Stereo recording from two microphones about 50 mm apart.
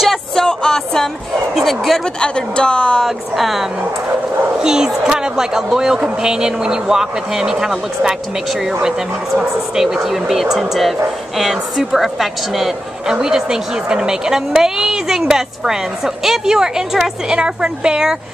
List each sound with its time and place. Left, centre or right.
0.4 s music: centre
1.5 s speech: centre
2.1 s speech: centre
3.0 s speech: centre
4.6 s a woman's voice: centre